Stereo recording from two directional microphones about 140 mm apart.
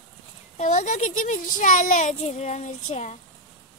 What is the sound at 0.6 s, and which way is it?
Speech, 60° left (ahead or behind).